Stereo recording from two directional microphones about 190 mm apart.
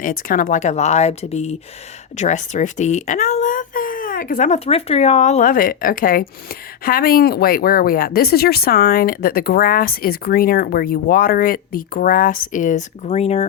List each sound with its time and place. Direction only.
0.0 s speech: 45° left (ahead or behind)